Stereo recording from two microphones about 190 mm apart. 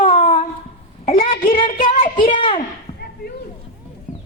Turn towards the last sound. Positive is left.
turn(degrees=40)  # may be behind; listen again after turning